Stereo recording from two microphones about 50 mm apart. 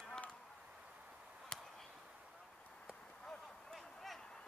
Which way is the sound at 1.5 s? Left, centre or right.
Centre.